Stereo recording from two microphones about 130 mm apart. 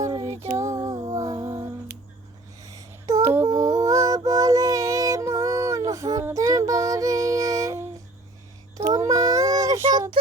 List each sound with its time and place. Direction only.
0.0 s music: 25° right (ahead or behind)
2.6 s a sound: 25° right (ahead or behind)
8.8 s child singing: 25° right (ahead or behind)